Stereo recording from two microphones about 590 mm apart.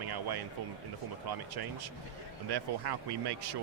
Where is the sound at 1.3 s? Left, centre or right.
Right.